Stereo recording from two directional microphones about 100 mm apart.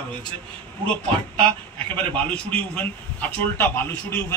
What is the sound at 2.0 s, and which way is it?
A man's voice, 15° left (ahead or behind).